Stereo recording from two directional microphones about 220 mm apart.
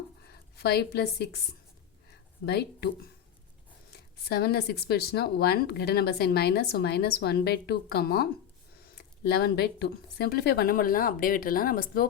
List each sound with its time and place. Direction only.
0.3 s a woman's voice: 45° left (ahead or behind)
2.5 s speech: 45° left (ahead or behind)
3.9 s speech: 45° left (ahead or behind)